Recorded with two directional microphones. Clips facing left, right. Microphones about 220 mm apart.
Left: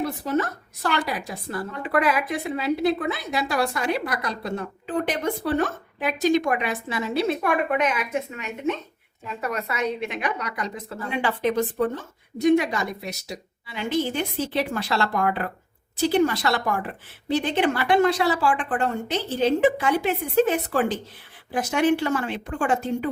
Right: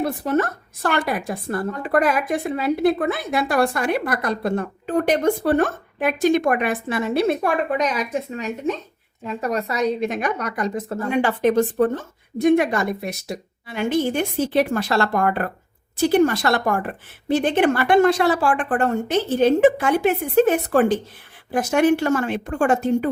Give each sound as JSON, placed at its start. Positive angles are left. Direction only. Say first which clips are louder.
{"t": 0.0, "sound": "a woman's voice", "louder": "right 4 dB", "side_deg": -55}
{"t": 7.4, "sound": "a woman's voice", "louder": "right 2 dB", "side_deg": -35}